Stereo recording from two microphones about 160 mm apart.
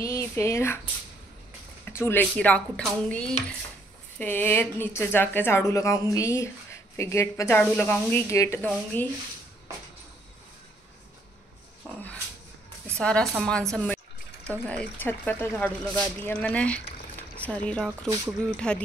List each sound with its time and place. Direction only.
0.0 s speech: 15° left (ahead or behind)
1.9 s a woman's voice: 15° left (ahead or behind)
11.8 s speech: 10° left (ahead or behind)
13.0 s a woman's voice: 5° left (ahead or behind)
13.4 s a sound: 5° left (ahead or behind)
14.7 s a woman's voice: 10° left (ahead or behind)